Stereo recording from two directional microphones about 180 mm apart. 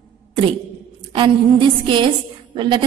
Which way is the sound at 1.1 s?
25° right (ahead or behind).